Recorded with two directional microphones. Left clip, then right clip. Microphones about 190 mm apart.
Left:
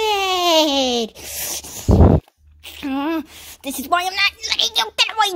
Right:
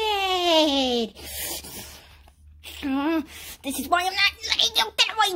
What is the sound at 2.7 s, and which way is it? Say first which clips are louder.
A woman's voice: left 3 dB; 35° left (ahead or behind).